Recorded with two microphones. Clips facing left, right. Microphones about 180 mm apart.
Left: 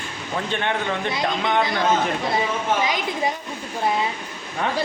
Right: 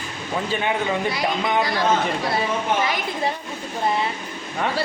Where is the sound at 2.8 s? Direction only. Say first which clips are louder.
Left 1 dB; 15° left (ahead or behind).